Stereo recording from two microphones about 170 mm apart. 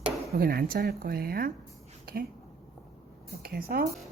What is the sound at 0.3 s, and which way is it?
Speech, 60° right (ahead or behind).